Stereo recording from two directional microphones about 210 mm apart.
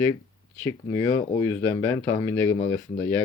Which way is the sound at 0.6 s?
15° left (ahead or behind).